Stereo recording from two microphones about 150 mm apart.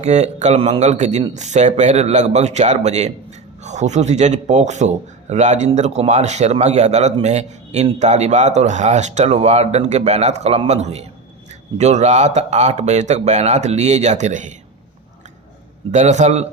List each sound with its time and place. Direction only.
0.0 s a man's voice: 50° right (ahead or behind)
15.9 s a man's voice: 50° right (ahead or behind)